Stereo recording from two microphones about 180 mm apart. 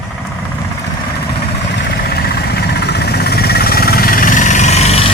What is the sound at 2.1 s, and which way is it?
Vehicle, 60° left (ahead or behind).